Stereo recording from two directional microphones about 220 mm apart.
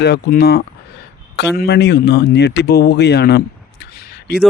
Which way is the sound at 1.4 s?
50° left (ahead or behind).